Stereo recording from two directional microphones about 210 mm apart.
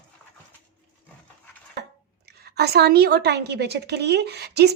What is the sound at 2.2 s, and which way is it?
A woman's voice, 50° right (ahead or behind).